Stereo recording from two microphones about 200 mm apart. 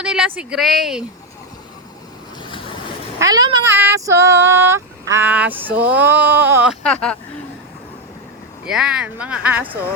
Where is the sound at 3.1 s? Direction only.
20° right (ahead or behind).